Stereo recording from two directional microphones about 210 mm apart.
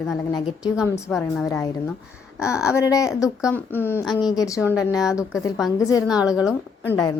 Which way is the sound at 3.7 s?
10° left (ahead or behind).